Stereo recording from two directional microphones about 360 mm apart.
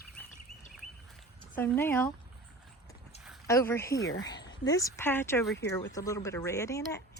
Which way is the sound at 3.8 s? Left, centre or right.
Left.